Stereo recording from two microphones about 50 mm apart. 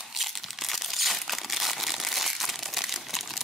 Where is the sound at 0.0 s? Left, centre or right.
Centre.